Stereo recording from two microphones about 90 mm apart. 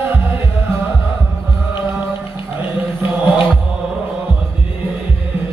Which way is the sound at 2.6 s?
20° right (ahead or behind).